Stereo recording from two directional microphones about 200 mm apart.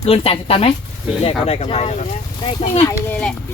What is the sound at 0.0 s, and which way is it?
Speech, 30° left (ahead or behind).